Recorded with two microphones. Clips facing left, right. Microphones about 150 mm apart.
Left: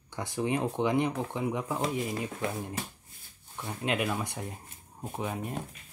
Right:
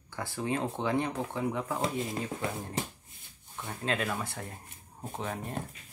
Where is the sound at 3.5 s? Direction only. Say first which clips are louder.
Left 2 dB; 15° left (ahead or behind).